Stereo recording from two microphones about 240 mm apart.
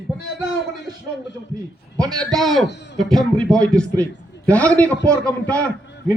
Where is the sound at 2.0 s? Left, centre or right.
Centre.